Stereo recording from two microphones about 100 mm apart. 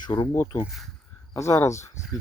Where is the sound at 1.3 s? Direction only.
30° left (ahead or behind).